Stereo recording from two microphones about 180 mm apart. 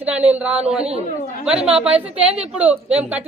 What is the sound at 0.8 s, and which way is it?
Speech, 35° right (ahead or behind).